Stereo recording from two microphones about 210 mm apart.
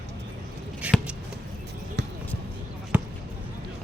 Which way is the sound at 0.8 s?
5° right (ahead or behind).